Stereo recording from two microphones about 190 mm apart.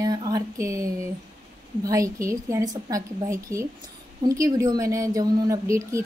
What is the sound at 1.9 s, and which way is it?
A woman's voice, 15° right (ahead or behind).